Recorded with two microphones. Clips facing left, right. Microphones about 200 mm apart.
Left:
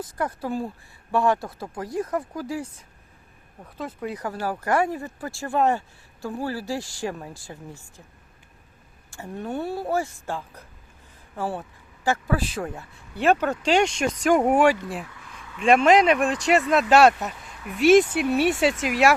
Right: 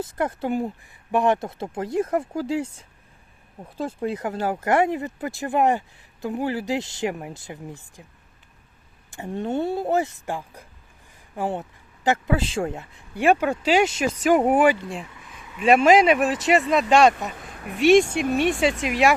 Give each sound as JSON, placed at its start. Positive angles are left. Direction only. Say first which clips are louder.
{"t": 0.0, "sound": "speech", "louder": "right 3 dB", "side_deg": -25}
{"t": 3.8, "sound": "speech", "louder": "right 5 dB", "side_deg": -30}
{"t": 9.0, "sound": "speech", "louder": "right 4 dB", "side_deg": -20}
{"t": 15.1, "sound": "a sound", "louder": "even", "side_deg": -20}
{"t": 15.5, "sound": "speech", "louder": "right 1 dB", "side_deg": -5}
{"t": 17.3, "sound": "speech", "louder": "right 2 dB", "side_deg": -50}
{"t": 17.7, "sound": "speech", "louder": "even", "side_deg": 0}